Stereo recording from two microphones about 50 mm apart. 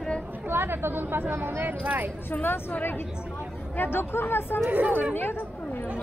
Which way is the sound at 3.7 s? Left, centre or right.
Left.